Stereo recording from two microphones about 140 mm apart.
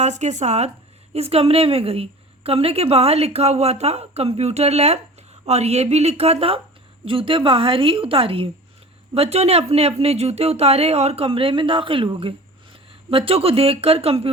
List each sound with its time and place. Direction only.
0.0 s a woman's voice: 55° right (ahead or behind)